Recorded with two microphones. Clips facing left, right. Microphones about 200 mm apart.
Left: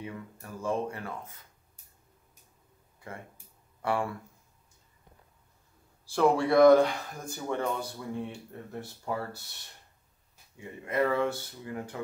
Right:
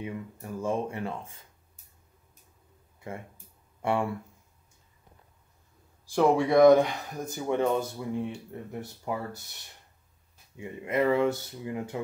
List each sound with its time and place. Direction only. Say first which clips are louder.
0.0 s speech: right 4 dB; 20° right (ahead or behind)
3.8 s speech: right 2 dB; 25° right (ahead or behind)
6.0 s speech: right 2 dB; 15° right (ahead or behind)
10.5 s speech: right 3 dB; 20° right (ahead or behind)